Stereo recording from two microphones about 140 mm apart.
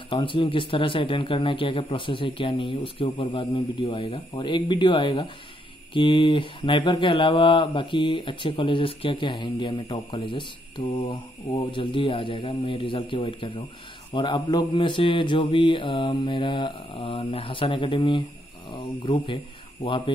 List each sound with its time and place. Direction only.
0.1 s speech: 35° left (ahead or behind)